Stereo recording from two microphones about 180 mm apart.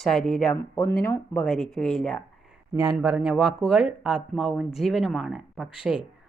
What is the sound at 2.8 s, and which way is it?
A woman's voice, 10° right (ahead or behind).